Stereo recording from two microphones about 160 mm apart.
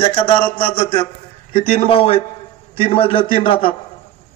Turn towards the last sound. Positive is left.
turn(degrees=35)  # may be behind; listen again after turning